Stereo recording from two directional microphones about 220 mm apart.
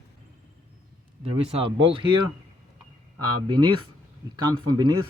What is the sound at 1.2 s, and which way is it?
Speech, 25° right (ahead or behind).